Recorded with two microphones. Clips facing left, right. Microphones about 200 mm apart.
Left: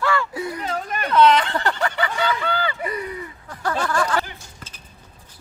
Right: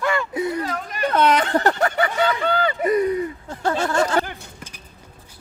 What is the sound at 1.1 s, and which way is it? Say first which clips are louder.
Speech: left 2 dB; 45° right (ahead or behind).